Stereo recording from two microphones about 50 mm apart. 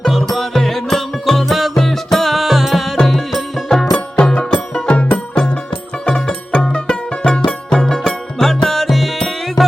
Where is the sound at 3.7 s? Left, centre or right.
Centre.